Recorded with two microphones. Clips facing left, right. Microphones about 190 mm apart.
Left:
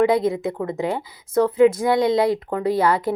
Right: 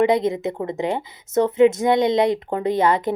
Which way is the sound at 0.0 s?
20° right (ahead or behind).